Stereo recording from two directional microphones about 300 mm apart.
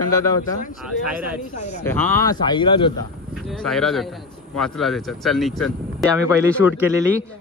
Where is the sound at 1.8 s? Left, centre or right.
Centre.